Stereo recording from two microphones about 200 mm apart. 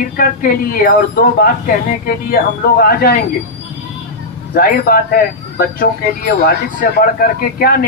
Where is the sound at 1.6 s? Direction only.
45° left (ahead or behind).